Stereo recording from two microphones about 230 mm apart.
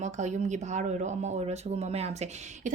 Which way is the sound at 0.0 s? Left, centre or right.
Right.